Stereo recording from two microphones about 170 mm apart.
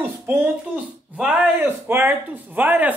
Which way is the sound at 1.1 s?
5° right (ahead or behind).